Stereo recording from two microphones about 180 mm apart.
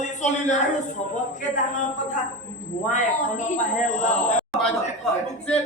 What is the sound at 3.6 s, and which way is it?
Speech, 40° left (ahead or behind).